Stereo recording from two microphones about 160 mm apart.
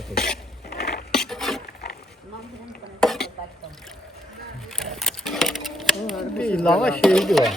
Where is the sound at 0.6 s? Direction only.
75° left (ahead or behind).